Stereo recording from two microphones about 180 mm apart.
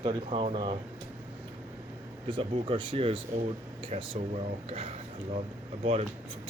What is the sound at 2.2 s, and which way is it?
Speech, 30° right (ahead or behind).